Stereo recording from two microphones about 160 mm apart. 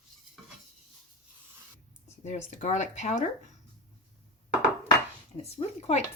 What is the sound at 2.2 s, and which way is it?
Speech, 45° left (ahead or behind).